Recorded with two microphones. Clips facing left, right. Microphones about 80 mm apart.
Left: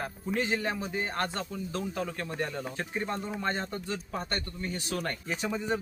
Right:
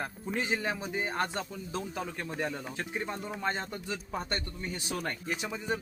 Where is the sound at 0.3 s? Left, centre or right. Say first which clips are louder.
Left 2 dB; centre.